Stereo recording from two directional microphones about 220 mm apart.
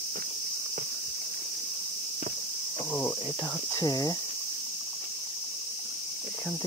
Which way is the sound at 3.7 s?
15° left (ahead or behind).